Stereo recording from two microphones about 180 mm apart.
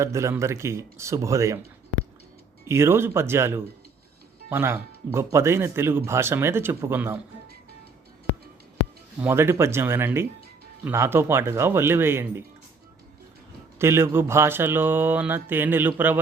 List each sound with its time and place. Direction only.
0.0 s speech: 15° right (ahead or behind)
2.6 s speech: 15° right (ahead or behind)
9.2 s speech: 15° right (ahead or behind)
13.7 s speech: 15° right (ahead or behind)